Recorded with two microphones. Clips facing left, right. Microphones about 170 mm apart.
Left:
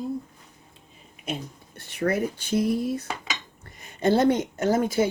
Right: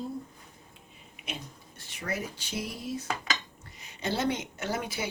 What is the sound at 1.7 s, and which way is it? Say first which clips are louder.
A woman's voice: left 10 dB; 60° left (ahead or behind).